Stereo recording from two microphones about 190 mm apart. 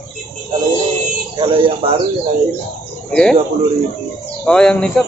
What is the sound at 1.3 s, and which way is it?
Speech, 30° right (ahead or behind).